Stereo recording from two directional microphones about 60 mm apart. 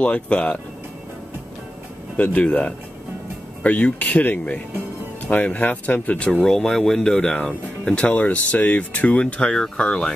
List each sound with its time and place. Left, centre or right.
0.0 s speech: centre
2.1 s speech: left
6.4 s speech: centre